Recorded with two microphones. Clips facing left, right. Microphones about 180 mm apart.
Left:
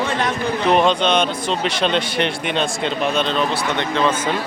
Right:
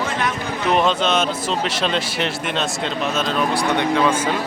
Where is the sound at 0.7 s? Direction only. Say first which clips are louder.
Left 1 dB; 5° right (ahead or behind).